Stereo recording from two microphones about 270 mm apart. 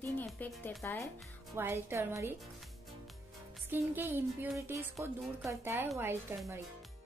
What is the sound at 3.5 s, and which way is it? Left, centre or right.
Music, centre.